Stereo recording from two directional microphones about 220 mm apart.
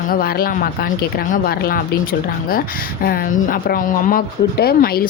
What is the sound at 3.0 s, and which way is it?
A woman's voice, 40° left (ahead or behind).